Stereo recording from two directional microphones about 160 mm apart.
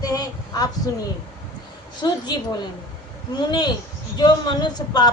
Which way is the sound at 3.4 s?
25° left (ahead or behind).